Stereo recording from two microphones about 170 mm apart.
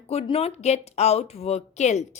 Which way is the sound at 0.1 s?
35° left (ahead or behind).